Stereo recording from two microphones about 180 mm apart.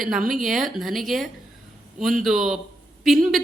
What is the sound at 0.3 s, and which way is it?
A man's voice, centre (ahead or behind).